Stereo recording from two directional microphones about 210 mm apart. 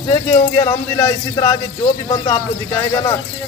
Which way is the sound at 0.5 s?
15° left (ahead or behind).